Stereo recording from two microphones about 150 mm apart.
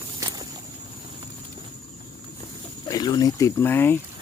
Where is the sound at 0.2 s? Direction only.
20° right (ahead or behind).